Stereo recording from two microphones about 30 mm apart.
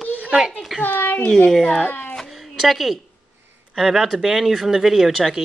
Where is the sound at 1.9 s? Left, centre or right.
Left.